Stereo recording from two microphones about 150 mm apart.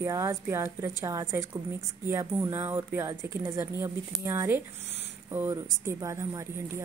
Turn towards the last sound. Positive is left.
turn(degrees=-20)  # may be behind; listen again after turning